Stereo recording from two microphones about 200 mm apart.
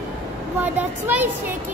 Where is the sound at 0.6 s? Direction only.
10° right (ahead or behind).